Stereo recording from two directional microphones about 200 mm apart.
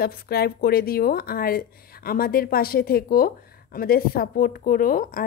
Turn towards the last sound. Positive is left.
turn(degrees=45)  # may be behind; listen again after turning